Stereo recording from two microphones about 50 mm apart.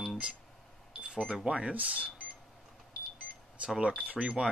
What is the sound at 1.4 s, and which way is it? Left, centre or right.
Speech, right.